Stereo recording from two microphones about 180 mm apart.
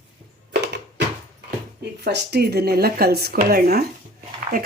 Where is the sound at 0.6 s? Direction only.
70° right (ahead or behind).